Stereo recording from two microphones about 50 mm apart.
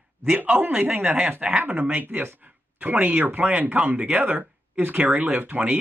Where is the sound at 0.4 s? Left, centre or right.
Right.